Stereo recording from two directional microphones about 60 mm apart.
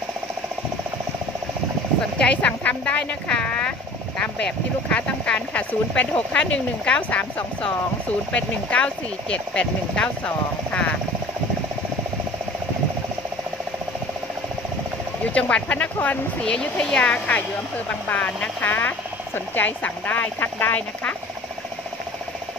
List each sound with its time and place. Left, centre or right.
2.1 s speech: left
4.2 s speech: centre
15.3 s speech: left